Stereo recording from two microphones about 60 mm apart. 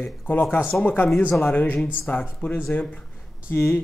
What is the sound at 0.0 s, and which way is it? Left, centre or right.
Speech, left.